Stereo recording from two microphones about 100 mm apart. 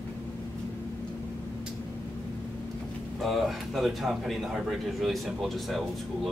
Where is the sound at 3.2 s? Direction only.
Centre (ahead or behind).